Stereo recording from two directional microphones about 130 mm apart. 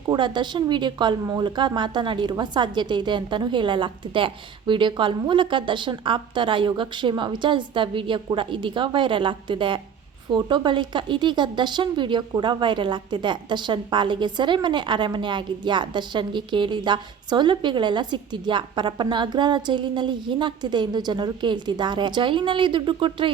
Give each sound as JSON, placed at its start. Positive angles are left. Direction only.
{"t": 0.1, "sound": "a woman's voice", "side_deg": -35}
{"t": 1.2, "sound": "speech", "side_deg": -25}
{"t": 1.5, "sound": "a woman's voice", "side_deg": -35}